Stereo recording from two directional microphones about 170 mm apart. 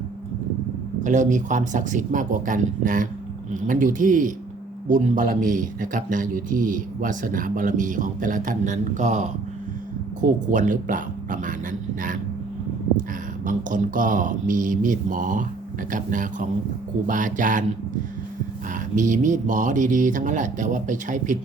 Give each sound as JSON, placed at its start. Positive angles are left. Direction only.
{"t": 1.0, "sound": "speech", "side_deg": -45}
{"t": 13.4, "sound": "speech", "side_deg": -50}
{"t": 18.9, "sound": "speech", "side_deg": -50}